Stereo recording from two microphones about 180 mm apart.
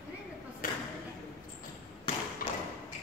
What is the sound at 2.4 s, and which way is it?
Thump, 50° left (ahead or behind).